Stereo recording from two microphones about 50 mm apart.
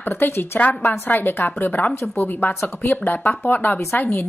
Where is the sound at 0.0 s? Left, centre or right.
Left.